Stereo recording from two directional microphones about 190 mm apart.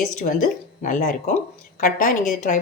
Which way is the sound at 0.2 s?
45° left (ahead or behind).